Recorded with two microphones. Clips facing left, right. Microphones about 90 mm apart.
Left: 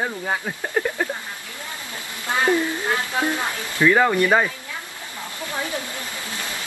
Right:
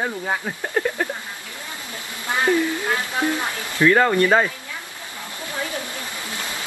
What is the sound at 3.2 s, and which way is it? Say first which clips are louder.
Speech: right 1 dB; 20° left (ahead or behind).